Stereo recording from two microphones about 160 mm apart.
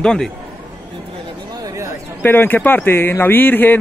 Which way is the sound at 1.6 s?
20° right (ahead or behind).